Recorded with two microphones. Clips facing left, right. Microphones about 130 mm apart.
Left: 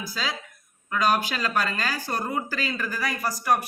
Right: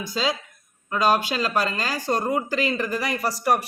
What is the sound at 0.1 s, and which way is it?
Speech, 25° right (ahead or behind).